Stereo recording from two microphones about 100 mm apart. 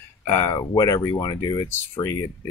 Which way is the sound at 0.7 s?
35° left (ahead or behind).